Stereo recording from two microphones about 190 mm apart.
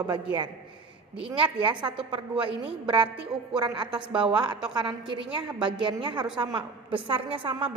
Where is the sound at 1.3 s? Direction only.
25° right (ahead or behind).